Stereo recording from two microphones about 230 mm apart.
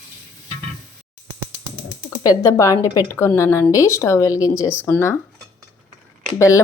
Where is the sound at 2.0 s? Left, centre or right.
Centre.